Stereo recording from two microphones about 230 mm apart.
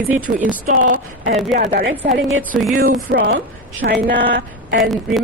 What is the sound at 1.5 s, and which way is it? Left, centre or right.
Speech, right.